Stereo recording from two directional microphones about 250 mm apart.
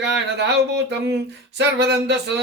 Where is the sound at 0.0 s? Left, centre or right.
Right.